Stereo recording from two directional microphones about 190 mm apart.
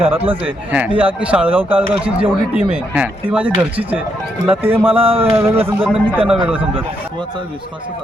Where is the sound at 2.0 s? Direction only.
30° right (ahead or behind).